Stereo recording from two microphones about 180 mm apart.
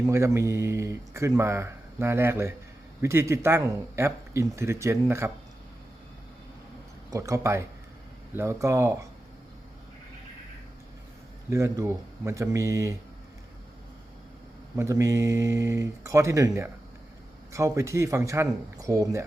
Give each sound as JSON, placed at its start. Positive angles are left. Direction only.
{"t": 0.0, "sound": "speech", "side_deg": -15}
{"t": 7.1, "sound": "speech", "side_deg": -15}
{"t": 11.4, "sound": "speech", "side_deg": -15}
{"t": 14.8, "sound": "speech", "side_deg": -15}